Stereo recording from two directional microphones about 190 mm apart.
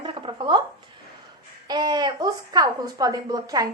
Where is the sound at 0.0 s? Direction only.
25° right (ahead or behind).